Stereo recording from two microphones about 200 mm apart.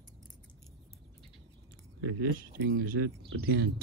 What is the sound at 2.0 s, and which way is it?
Speech, 75° right (ahead or behind).